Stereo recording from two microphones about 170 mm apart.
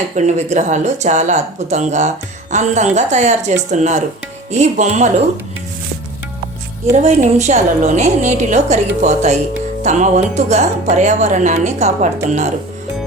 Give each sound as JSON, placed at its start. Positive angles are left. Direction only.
{"t": 0.2, "sound": "speech", "side_deg": -45}
{"t": 7.0, "sound": "speech", "side_deg": -45}